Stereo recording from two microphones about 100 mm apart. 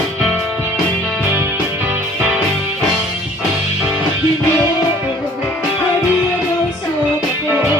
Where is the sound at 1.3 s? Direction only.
25° right (ahead or behind).